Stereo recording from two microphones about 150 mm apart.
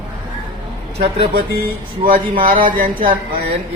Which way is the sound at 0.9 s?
40° right (ahead or behind).